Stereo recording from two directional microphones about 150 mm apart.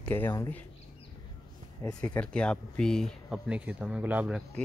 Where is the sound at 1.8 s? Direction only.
20° left (ahead or behind).